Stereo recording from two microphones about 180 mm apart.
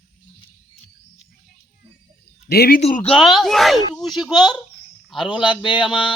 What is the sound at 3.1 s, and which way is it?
Speech, centre (ahead or behind).